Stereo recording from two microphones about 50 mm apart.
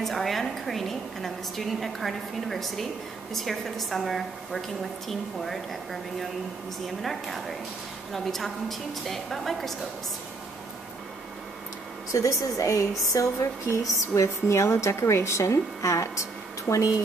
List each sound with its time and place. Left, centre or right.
0.0 s a woman's voice: centre
12.1 s a woman's voice: left